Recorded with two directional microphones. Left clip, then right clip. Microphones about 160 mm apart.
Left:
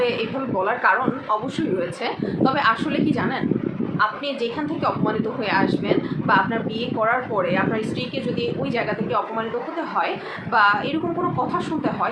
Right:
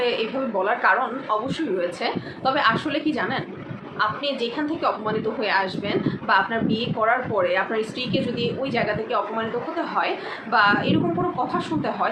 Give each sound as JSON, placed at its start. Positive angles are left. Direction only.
{"t": 0.0, "sound": "speech", "side_deg": 0}
{"t": 2.0, "sound": "a woman's voice", "side_deg": 5}
{"t": 4.8, "sound": "a woman's voice", "side_deg": 5}
{"t": 10.5, "sound": "a woman's voice", "side_deg": 5}